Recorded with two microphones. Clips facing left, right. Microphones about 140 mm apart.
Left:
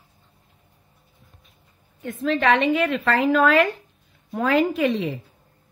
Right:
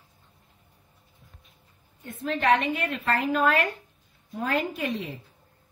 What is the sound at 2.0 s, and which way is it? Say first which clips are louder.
A woman's voice: left 3 dB; 90° left.